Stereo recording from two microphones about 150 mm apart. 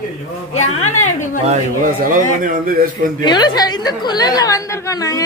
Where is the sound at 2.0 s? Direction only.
65° right (ahead or behind).